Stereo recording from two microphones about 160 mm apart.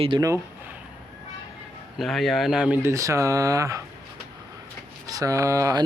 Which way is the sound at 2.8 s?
20° right (ahead or behind).